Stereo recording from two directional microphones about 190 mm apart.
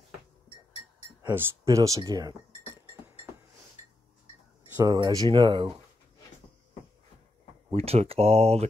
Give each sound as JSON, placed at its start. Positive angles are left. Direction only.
{"t": 1.2, "sound": "speech", "side_deg": -10}
{"t": 4.7, "sound": "speech", "side_deg": -20}
{"t": 7.7, "sound": "speech", "side_deg": -30}